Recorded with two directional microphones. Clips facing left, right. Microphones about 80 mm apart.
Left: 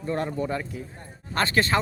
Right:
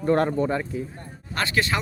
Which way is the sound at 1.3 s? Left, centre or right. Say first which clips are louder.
Left 2 dB; left.